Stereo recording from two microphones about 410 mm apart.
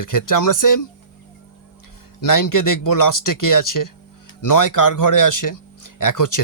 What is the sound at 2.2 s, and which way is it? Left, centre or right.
Speech, left.